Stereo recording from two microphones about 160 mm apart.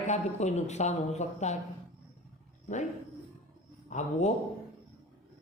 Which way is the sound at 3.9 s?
50° left (ahead or behind).